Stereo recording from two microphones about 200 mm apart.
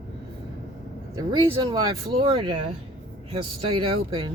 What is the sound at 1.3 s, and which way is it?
Speech, 25° right (ahead or behind).